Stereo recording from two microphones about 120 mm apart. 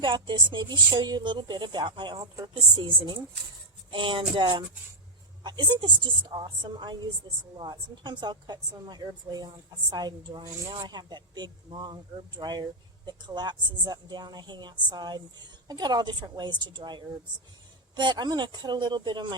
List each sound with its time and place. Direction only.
0.0 s speech: 40° right (ahead or behind)